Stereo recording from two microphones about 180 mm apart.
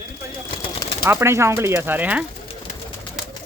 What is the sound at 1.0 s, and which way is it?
Speech, 15° right (ahead or behind).